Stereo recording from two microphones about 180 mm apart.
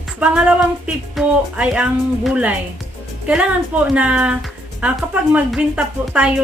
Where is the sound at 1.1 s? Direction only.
5° right (ahead or behind).